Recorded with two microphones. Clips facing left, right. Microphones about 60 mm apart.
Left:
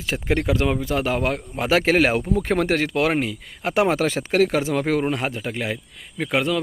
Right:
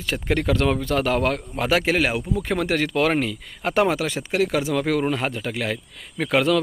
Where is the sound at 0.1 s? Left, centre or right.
Centre.